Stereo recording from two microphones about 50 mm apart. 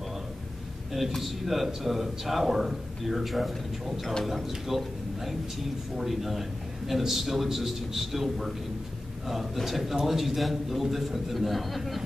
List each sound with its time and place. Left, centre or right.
0.9 s a man's voice: centre